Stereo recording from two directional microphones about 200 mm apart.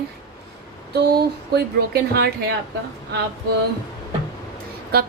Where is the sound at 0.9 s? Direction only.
55° right (ahead or behind).